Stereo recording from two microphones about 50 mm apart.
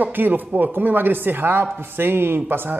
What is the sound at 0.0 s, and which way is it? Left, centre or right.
A man's voice, right.